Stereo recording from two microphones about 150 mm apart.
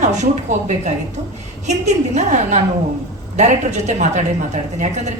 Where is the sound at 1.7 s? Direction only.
50° right (ahead or behind).